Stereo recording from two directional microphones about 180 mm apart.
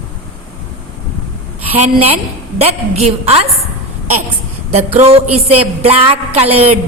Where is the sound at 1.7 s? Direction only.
35° right (ahead or behind).